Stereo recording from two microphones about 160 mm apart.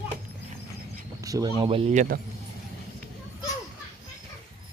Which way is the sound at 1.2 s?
20° right (ahead or behind).